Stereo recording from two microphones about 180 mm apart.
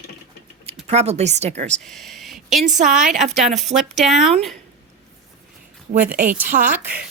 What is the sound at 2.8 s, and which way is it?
Speech, 45° right (ahead or behind).